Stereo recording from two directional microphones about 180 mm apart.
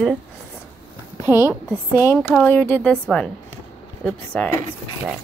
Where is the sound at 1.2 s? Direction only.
20° left (ahead or behind).